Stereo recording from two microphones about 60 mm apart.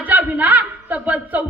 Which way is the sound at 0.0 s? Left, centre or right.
Right.